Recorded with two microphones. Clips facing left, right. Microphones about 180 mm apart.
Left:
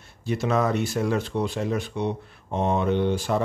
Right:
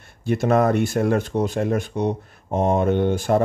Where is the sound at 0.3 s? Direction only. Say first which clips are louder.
Right 5 dB; 50° right (ahead or behind).